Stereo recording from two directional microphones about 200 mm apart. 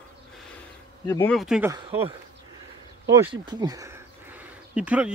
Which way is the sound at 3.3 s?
20° right (ahead or behind).